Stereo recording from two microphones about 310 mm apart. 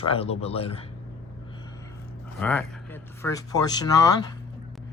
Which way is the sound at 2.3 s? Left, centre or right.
Centre.